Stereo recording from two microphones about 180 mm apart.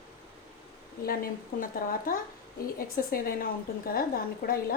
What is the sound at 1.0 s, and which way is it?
A woman's voice, 55° left (ahead or behind).